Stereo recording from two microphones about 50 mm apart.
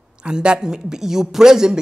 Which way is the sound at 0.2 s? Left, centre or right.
Centre.